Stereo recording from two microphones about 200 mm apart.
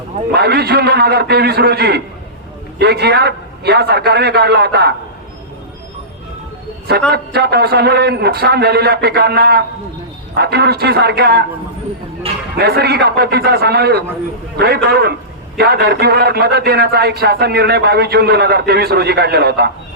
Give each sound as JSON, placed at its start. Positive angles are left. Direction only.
{"t": 0.3, "sound": "a man's voice", "side_deg": -55}
{"t": 7.1, "sound": "a man's voice", "side_deg": -55}
{"t": 12.5, "sound": "a man's voice", "side_deg": -50}